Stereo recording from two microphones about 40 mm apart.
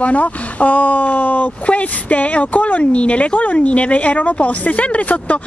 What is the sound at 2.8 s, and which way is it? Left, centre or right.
Speech, left.